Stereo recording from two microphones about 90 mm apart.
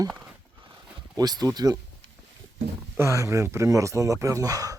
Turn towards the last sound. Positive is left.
turn(degrees=-40)  # may be behind; listen again after turning